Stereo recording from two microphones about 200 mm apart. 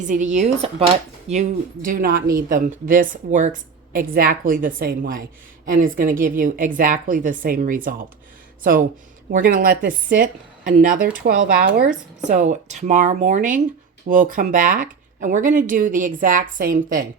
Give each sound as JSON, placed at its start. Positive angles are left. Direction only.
{"t": 0.0, "sound": "speech", "side_deg": -40}
{"t": 9.3, "sound": "speech", "side_deg": -45}